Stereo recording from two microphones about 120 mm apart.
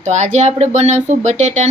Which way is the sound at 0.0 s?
70° right (ahead or behind).